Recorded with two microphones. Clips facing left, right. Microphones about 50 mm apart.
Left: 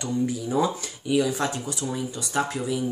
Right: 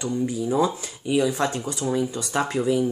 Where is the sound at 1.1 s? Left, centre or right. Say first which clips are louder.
Right 2 dB; right.